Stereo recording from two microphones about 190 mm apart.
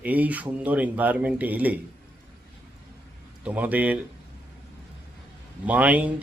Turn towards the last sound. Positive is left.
turn(degrees=-5)  # may be behind; listen again after turning